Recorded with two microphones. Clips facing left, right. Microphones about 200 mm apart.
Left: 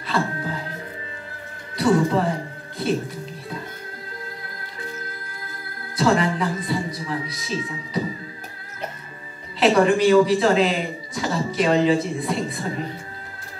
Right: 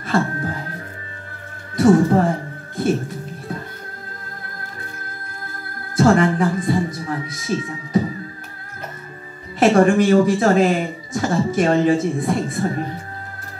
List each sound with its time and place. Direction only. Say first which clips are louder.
0.0 s music: right 4 dB; 50° right (ahead or behind)
1.8 s music: right 5 dB; 50° right (ahead or behind)
5.9 s speech: right 5 dB; 50° right (ahead or behind)
9.6 s a man's voice: right 3 dB; 50° right (ahead or behind)